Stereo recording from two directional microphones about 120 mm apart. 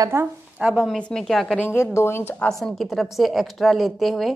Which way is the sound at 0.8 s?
5° left (ahead or behind).